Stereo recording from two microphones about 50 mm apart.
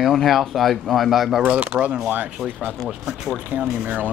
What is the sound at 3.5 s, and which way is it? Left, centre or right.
Speech, right.